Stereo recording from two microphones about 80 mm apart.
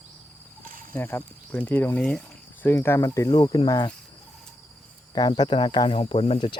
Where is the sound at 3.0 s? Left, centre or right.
Left.